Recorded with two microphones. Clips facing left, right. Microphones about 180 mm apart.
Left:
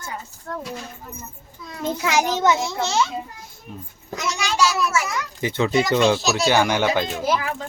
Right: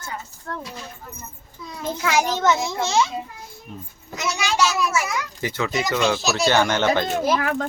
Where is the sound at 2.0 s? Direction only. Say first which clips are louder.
Even; 20° left (ahead or behind).